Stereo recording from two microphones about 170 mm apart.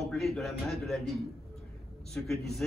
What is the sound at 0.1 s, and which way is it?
A man's voice, centre (ahead or behind).